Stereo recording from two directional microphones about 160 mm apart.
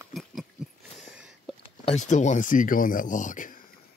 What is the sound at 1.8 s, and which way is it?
Speech, 45° left (ahead or behind).